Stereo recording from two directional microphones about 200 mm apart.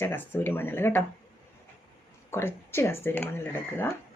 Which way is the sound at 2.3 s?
10° left (ahead or behind).